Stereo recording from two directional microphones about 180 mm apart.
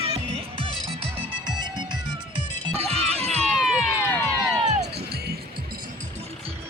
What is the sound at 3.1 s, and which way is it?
Music, 35° right (ahead or behind).